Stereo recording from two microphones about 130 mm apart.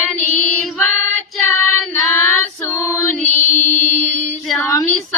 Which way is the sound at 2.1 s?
20° left (ahead or behind).